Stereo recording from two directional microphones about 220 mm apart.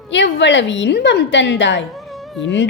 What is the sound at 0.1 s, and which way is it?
Speech, 55° left (ahead or behind).